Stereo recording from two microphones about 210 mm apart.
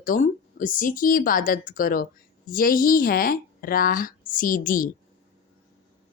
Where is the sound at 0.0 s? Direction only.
40° left (ahead or behind).